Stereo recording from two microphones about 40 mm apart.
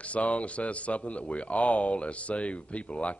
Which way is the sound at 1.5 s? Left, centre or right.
Left.